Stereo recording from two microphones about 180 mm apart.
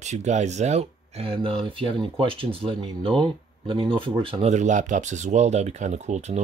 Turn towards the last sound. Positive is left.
turn(degrees=-40)  # may be behind; listen again after turning